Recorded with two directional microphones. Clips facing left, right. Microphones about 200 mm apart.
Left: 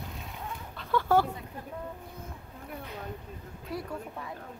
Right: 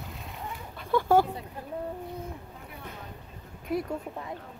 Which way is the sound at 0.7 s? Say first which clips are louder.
Right 3 dB; 15° right (ahead or behind).